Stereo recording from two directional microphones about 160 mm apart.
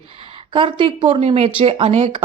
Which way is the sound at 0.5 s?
35° right (ahead or behind).